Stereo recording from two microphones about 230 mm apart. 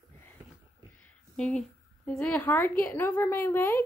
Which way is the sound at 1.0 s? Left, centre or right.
Centre.